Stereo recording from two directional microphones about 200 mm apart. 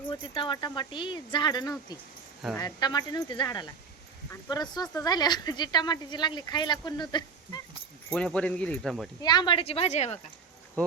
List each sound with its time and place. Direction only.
0.1 s speech: 25° left (ahead or behind)
8.1 s speech: 5° left (ahead or behind)
9.2 s speech: 20° left (ahead or behind)